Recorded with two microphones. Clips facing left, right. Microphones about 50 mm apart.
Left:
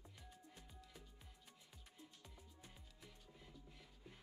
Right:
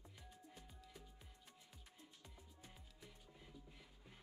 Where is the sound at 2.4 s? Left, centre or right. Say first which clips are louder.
Even; centre.